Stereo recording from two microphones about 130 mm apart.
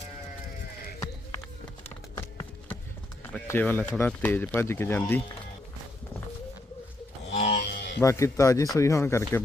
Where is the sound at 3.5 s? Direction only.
15° left (ahead or behind).